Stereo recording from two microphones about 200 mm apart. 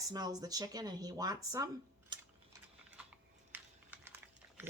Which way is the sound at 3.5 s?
10° right (ahead or behind).